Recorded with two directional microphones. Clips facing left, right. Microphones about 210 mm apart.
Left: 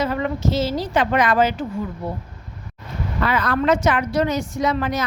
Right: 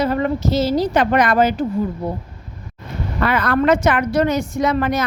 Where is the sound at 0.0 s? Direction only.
40° right (ahead or behind).